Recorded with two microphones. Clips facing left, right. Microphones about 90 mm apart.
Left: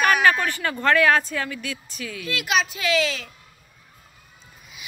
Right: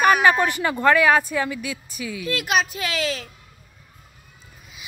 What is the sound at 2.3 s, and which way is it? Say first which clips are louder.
Speech: right 1 dB; 40° right (ahead or behind).